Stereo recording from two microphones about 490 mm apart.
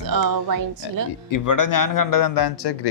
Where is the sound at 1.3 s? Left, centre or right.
Left.